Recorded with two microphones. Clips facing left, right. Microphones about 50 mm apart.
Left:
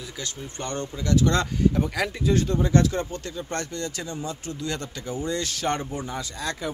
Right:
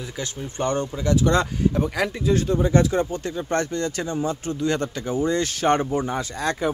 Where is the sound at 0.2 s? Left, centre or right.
Right.